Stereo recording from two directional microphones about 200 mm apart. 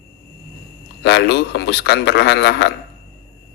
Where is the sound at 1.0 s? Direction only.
55° left (ahead or behind).